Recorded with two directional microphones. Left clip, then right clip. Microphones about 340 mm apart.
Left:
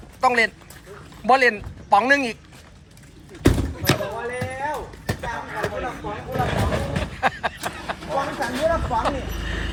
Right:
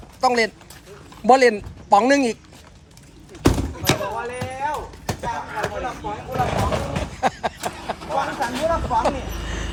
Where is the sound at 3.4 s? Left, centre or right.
Centre.